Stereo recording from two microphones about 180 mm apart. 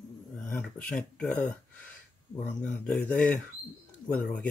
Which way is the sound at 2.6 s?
5° left (ahead or behind).